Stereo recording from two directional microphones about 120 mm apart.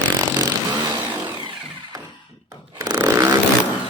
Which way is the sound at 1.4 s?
40° right (ahead or behind).